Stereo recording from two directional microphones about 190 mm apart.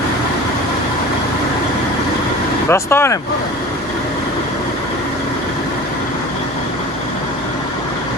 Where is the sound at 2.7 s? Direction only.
10° left (ahead or behind).